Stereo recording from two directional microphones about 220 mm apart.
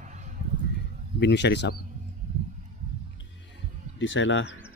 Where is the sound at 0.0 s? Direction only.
35° right (ahead or behind).